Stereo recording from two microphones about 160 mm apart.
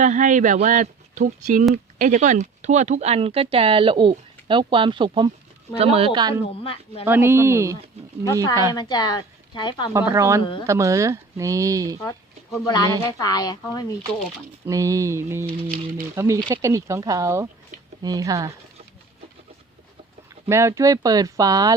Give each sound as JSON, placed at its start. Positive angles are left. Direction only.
{"t": 0.0, "sound": "speech", "side_deg": -50}
{"t": 6.5, "sound": "speech", "side_deg": 35}
{"t": 7.0, "sound": "mantra", "side_deg": -15}
{"t": 8.7, "sound": "a woman's voice", "side_deg": 25}
{"t": 9.9, "sound": "speech", "side_deg": -15}
{"t": 12.0, "sound": "a woman's voice", "side_deg": 20}
{"t": 14.6, "sound": "mantra", "side_deg": -20}
{"t": 16.1, "sound": "speech", "side_deg": -20}
{"t": 20.5, "sound": "speech", "side_deg": -15}